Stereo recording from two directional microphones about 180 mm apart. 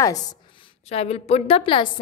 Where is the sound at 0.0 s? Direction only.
20° left (ahead or behind).